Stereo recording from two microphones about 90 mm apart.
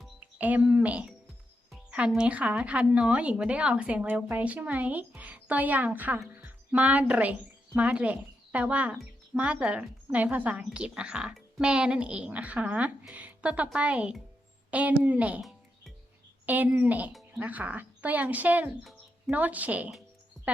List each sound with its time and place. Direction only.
0.2 s a woman's voice: 15° right (ahead or behind)
15.4 s music: centre (ahead or behind)
16.5 s a woman's voice: 20° right (ahead or behind)
20.4 s a sound: centre (ahead or behind)